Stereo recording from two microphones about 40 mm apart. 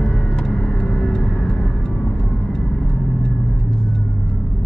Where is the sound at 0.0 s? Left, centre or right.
Left.